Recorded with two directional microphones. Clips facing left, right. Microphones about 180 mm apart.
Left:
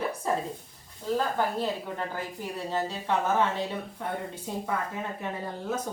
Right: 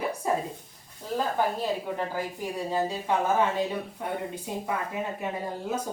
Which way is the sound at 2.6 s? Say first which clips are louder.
Right 2 dB; 10° right (ahead or behind).